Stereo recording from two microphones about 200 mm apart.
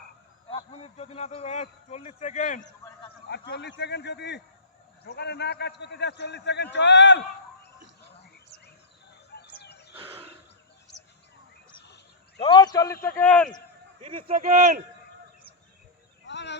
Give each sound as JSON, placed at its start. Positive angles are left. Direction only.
{"t": 0.5, "sound": "speech", "side_deg": 30}
{"t": 3.2, "sound": "a man's voice", "side_deg": 55}
{"t": 9.3, "sound": "chicken", "side_deg": 55}
{"t": 12.4, "sound": "a man's voice", "side_deg": 25}
{"t": 13.1, "sound": "speech", "side_deg": 10}
{"t": 14.0, "sound": "a man's voice", "side_deg": -30}
{"t": 16.2, "sound": "a sound", "side_deg": 60}